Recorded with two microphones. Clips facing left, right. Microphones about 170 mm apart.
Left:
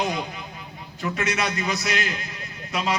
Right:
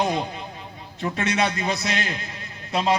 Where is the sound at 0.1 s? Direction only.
30° right (ahead or behind).